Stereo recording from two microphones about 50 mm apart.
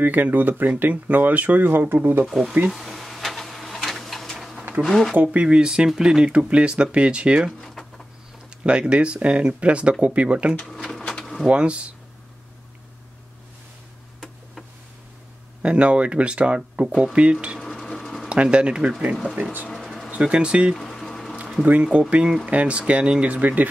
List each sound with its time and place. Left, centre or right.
0.0 s speech: right
1.7 s speech: right
2.2 s speech: centre
2.7 s drawer open or close: centre
4.8 s speech: centre
5.1 s speech: right
8.6 s speech: right
10.9 s drawer open or close: centre
11.4 s speech: right
15.6 s speech: right
17.8 s sewing machine: centre
18.3 s speech: right
20.7 s a sound: centre
22.1 s speech: centre